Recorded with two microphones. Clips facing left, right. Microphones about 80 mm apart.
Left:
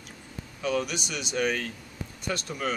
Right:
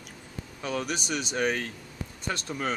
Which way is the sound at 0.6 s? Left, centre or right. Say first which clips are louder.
Left 3 dB; right.